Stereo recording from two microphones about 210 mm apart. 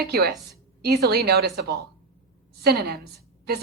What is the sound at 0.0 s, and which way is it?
A woman's voice, 50° right (ahead or behind).